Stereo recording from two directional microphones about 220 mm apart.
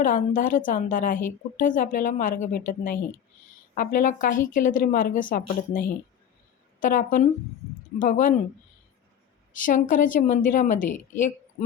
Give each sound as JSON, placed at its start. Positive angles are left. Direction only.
{"t": 0.0, "sound": "a woman's voice", "side_deg": 35}
{"t": 9.5, "sound": "a woman's voice", "side_deg": 35}